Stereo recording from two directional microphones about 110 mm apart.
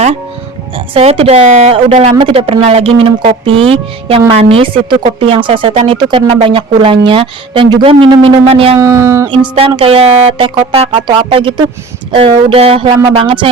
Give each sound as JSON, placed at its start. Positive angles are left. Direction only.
{"t": 0.9, "sound": "a woman's voice", "side_deg": -60}
{"t": 2.1, "sound": "speech", "side_deg": -55}
{"t": 8.8, "sound": "speech", "side_deg": -25}
{"t": 9.6, "sound": "speech", "side_deg": -60}
{"t": 13.1, "sound": "speech", "side_deg": -50}